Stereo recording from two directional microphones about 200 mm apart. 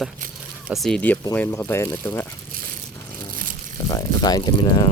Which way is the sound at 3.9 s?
20° left (ahead or behind).